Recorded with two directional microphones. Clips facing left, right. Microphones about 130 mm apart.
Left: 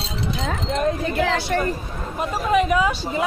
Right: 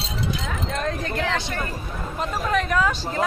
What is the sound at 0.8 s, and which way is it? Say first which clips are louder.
Wind chime: left 6 dB; 10° left (ahead or behind).